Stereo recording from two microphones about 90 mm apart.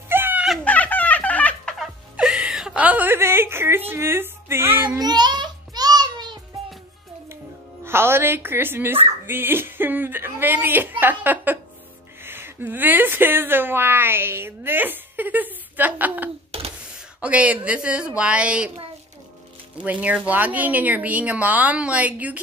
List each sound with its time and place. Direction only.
0.1 s a sound: 25° right (ahead or behind)
0.7 s music: 20° left (ahead or behind)
1.8 s music: 5° right (ahead or behind); by 4.8 s 25° right (ahead or behind)
4.8 s child singing: 50° right (ahead or behind)
7.8 s a woman's voice: 25° right (ahead or behind)
19.8 s a woman's voice: 15° right (ahead or behind)